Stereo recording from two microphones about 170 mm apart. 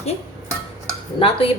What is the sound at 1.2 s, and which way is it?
Speech, 35° left (ahead or behind).